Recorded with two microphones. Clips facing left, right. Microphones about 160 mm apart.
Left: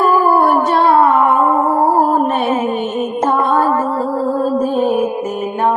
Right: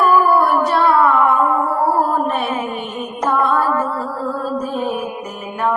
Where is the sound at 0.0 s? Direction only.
30° left (ahead or behind).